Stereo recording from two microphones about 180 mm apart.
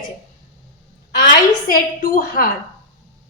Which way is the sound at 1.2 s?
50° left (ahead or behind).